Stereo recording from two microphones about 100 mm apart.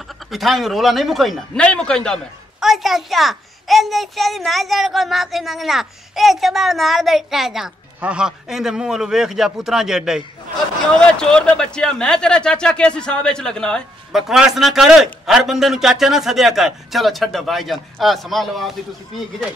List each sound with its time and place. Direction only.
0.3 s a child's voice: centre (ahead or behind)
11.0 s speech: 5° left (ahead or behind)
14.1 s a child's voice: 5° right (ahead or behind)